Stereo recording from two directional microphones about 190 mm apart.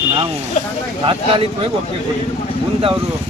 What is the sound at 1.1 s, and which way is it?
Speech, 25° right (ahead or behind).